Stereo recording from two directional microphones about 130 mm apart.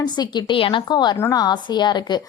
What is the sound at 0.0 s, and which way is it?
A woman's voice, 35° left (ahead or behind).